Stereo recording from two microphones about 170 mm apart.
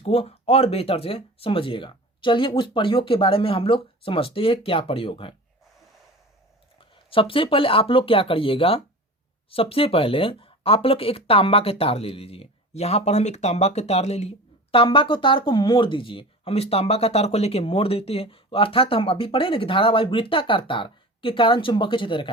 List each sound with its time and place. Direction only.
0.0 s speech: 35° left (ahead or behind)
6.7 s speech: 30° left (ahead or behind)